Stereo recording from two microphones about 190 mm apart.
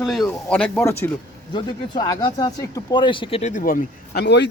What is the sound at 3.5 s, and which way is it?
Speech, 50° left (ahead or behind).